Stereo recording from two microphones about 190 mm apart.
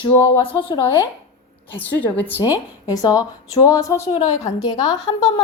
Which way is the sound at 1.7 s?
10° left (ahead or behind).